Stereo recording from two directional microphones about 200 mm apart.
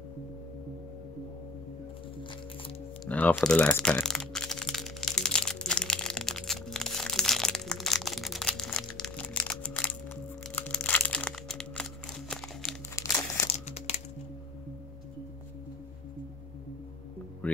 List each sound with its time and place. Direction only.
3.1 s a sound: 5° left (ahead or behind)
10.5 s crumpling: 5° left (ahead or behind)
12.9 s crumpling: 15° left (ahead or behind)
13.5 s music: 35° left (ahead or behind)